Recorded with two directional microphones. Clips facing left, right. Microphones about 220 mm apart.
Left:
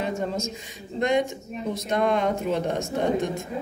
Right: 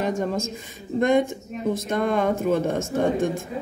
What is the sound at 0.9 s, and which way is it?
Speech, 50° right (ahead or behind).